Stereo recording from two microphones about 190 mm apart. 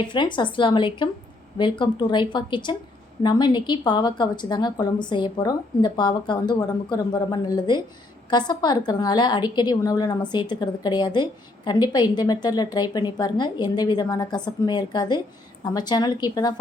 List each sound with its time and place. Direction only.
0.0 s a woman's voice: 25° left (ahead or behind)